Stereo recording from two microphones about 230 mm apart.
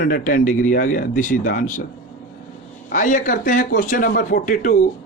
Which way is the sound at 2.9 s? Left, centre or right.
Left.